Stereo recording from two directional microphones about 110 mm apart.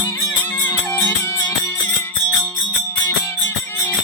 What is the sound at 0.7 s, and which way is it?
Music, 25° left (ahead or behind).